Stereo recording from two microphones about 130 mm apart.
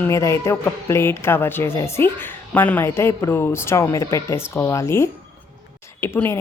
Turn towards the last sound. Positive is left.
turn(degrees=20)  # may be behind; listen again after turning